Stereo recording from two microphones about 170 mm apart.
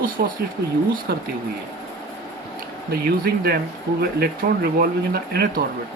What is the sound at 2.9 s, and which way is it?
Speech, 65° right (ahead or behind).